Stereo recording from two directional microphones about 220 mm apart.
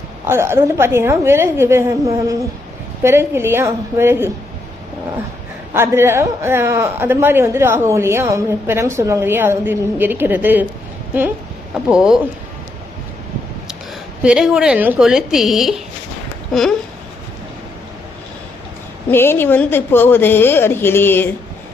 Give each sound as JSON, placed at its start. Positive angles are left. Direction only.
{"t": 0.3, "sound": "a man's voice", "side_deg": -10}
{"t": 5.7, "sound": "a man's voice", "side_deg": -10}
{"t": 11.7, "sound": "speech", "side_deg": -5}
{"t": 14.2, "sound": "speech", "side_deg": -5}
{"t": 19.1, "sound": "a woman's voice", "side_deg": 10}